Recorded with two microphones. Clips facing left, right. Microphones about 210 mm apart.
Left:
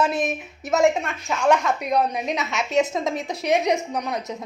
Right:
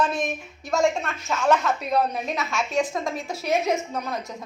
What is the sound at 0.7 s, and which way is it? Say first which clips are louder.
A woman's voice: left 3 dB; 20° left (ahead or behind).